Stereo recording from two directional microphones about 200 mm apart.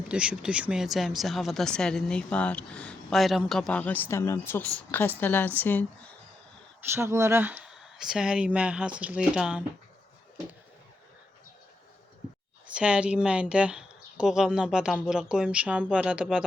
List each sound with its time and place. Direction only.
0.1 s a woman's voice: 5° right (ahead or behind)
6.8 s speech: 10° right (ahead or behind)
12.7 s speech: 5° right (ahead or behind)